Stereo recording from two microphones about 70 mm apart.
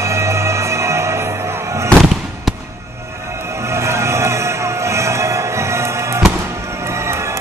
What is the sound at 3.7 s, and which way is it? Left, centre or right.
Music, right.